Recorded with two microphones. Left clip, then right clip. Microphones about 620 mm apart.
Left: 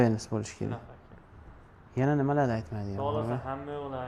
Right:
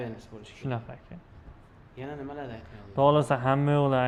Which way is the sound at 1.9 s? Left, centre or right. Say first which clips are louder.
Left 11 dB; left.